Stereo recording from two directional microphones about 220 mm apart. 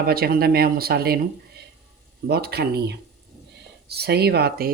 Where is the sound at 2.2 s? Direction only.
45° right (ahead or behind).